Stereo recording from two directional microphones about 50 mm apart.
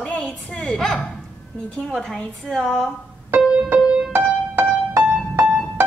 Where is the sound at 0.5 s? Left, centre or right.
Centre.